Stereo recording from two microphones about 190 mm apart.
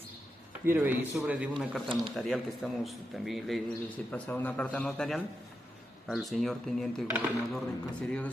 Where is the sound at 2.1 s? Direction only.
Centre (ahead or behind).